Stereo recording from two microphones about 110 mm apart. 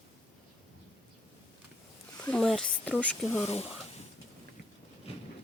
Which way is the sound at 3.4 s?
70° left (ahead or behind).